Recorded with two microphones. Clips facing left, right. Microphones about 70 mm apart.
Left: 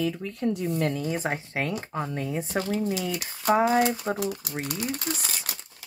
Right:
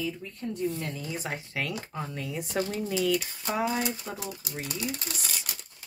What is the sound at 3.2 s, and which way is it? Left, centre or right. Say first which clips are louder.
Speech: left 10 dB; left.